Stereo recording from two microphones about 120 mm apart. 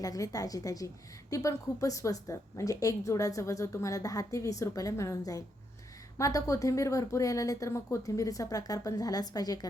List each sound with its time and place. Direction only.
0.0 s a woman's voice: 30° left (ahead or behind)